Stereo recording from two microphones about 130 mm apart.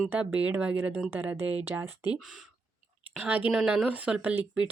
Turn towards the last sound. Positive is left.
turn(degrees=-10)  # may be behind; listen again after turning